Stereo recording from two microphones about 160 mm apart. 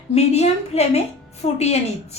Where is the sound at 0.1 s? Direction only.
40° left (ahead or behind).